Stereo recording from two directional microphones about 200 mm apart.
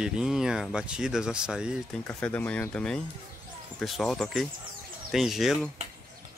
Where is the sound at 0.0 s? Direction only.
5° right (ahead or behind).